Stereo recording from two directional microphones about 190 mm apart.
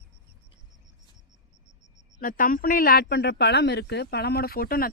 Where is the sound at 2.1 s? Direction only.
45° left (ahead or behind).